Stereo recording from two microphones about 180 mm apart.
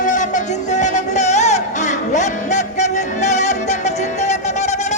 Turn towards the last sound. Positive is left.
turn(degrees=40)  # may be behind; listen again after turning